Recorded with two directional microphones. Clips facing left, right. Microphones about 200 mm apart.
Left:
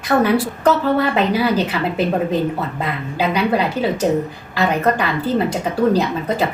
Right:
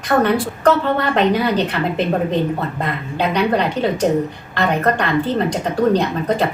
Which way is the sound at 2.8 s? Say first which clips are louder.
Left 1 dB; 5° left (ahead or behind).